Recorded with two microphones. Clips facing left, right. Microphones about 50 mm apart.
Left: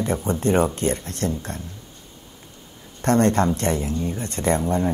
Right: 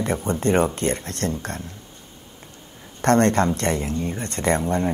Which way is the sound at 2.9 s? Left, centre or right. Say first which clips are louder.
Right 1 dB; right.